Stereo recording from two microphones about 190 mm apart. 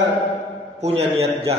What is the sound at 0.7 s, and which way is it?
Speech, 35° right (ahead or behind).